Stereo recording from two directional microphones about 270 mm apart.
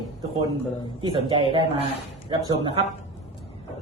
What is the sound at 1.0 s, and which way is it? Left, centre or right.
A man's voice, centre.